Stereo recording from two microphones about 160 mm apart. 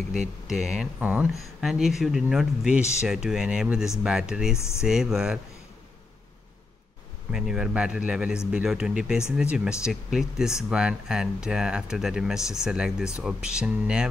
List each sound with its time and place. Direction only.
0.5 s speech: 5° right (ahead or behind)
7.2 s speech: 5° right (ahead or behind)